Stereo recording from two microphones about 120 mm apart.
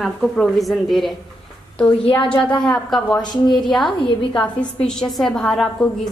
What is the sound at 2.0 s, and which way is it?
Speech, 45° left (ahead or behind).